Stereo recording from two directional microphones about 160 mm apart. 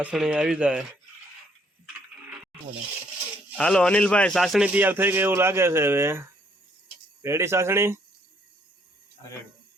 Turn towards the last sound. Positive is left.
turn(degrees=-15)  # may be behind; listen again after turning